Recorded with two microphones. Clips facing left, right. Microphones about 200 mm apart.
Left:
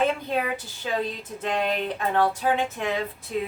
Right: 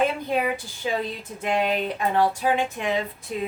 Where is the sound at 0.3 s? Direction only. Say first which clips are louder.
Right 2 dB; 15° right (ahead or behind).